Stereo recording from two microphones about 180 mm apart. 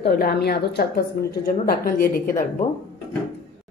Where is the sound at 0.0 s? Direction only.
60° left (ahead or behind).